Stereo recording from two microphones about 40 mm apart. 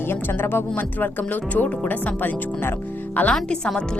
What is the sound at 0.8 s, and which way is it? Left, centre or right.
Speech, left.